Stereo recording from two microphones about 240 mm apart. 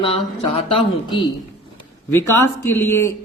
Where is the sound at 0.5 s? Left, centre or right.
Left.